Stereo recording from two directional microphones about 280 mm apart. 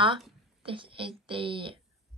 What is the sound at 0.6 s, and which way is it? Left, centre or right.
A woman's voice, centre.